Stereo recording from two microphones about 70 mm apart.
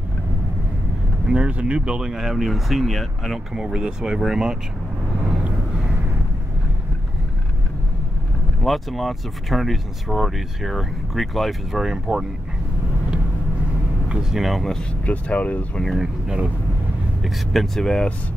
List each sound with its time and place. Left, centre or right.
1.2 s speech: centre
3.5 s speech: centre
8.6 s speech: centre
14.3 s speech: centre
14.8 s speech: centre
15.8 s speech: centre
16.3 s speech: centre
17.2 s speech: centre